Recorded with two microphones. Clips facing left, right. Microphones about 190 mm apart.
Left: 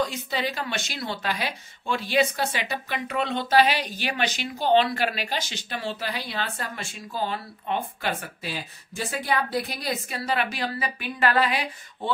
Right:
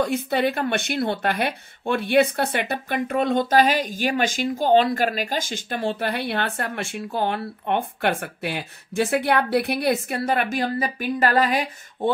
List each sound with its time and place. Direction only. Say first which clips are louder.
0.0 s speech: right 6 dB; 55° right (ahead or behind)